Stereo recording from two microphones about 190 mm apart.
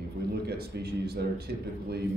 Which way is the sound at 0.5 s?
55° right (ahead or behind).